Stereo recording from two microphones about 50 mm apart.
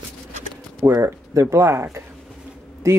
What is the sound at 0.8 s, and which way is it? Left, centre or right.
Speech, right.